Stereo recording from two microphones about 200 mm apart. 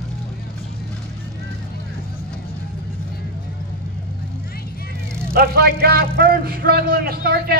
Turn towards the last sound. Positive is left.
turn(degrees=-50)  # may be behind; listen again after turning